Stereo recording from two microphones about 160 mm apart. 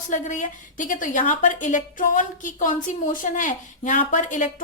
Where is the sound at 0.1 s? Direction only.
50° left (ahead or behind).